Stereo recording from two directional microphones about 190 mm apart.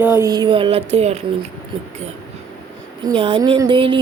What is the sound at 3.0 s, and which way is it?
Speech, 25° right (ahead or behind).